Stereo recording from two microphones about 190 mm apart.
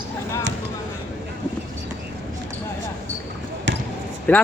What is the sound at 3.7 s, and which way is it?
Basketball bounce, 75° right (ahead or behind).